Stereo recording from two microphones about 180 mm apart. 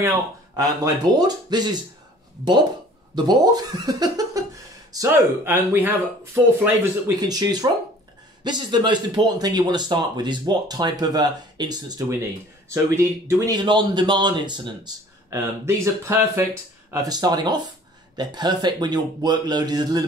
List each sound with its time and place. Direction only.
0.6 s speech: 20° right (ahead or behind)
3.3 s speech: 20° right (ahead or behind)